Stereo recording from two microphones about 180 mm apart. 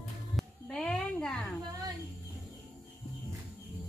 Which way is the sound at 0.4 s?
5° left (ahead or behind).